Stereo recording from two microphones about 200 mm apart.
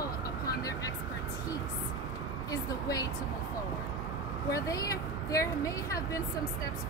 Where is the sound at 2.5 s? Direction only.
20° left (ahead or behind).